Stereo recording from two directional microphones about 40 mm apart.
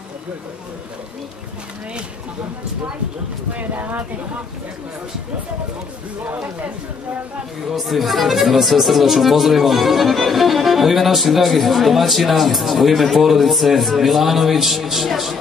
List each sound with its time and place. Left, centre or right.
3.5 s speech: right
7.6 s speech: centre